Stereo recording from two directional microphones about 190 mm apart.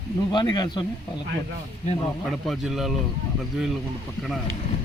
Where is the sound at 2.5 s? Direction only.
Centre (ahead or behind).